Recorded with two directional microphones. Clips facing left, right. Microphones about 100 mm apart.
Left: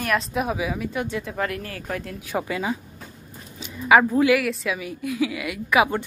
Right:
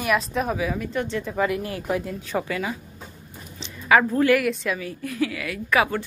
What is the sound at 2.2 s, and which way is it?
A woman's voice, 15° left (ahead or behind).